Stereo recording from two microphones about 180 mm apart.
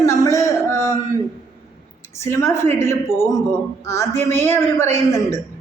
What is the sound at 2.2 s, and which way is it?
A man's voice, 15° left (ahead or behind).